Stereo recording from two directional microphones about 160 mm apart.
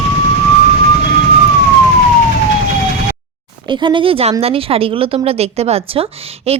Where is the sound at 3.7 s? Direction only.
30° right (ahead or behind).